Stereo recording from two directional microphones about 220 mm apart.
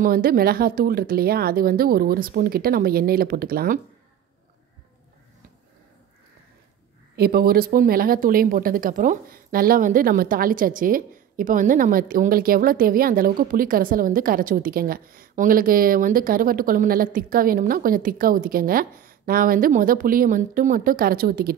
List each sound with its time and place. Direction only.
0.0 s speech: 40° right (ahead or behind)
7.2 s speech: 45° right (ahead or behind)